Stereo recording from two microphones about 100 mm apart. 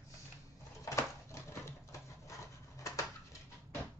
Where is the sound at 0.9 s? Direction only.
30° left (ahead or behind).